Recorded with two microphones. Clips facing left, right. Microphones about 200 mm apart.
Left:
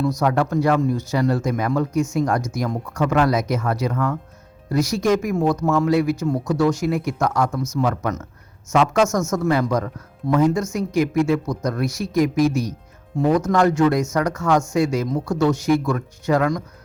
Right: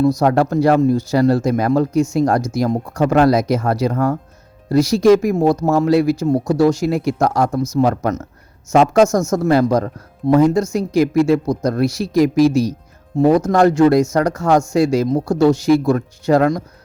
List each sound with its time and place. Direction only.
0.2 s speech: 35° right (ahead or behind)